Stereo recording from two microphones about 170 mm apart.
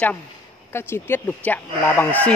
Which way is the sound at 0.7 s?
15° left (ahead or behind).